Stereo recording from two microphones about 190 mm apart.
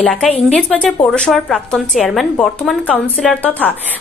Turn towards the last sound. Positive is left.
turn(degrees=5)  # may be behind; listen again after turning